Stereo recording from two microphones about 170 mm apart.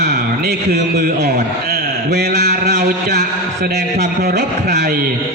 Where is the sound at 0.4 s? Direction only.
60° right (ahead or behind).